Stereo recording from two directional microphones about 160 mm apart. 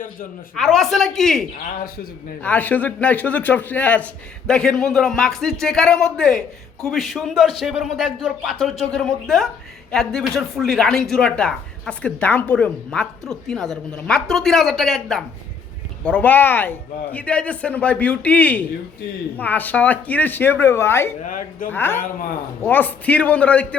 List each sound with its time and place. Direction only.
0.5 s speech: centre (ahead or behind)
21.2 s speech: 55° left (ahead or behind)
21.7 s speech: 15° left (ahead or behind)
22.0 s speech: 65° left (ahead or behind)
22.6 s speech: 10° left (ahead or behind)